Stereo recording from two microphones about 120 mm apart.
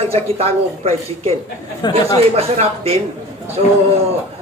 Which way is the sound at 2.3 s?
55° right (ahead or behind).